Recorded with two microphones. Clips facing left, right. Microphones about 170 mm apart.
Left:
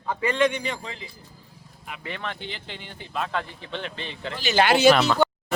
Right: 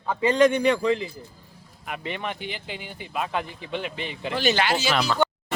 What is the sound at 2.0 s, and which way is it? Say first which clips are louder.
Speech: right 2 dB; 15° right (ahead or behind).